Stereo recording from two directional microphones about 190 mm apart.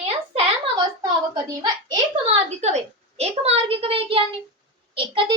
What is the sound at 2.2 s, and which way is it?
A child's voice, 35° right (ahead or behind).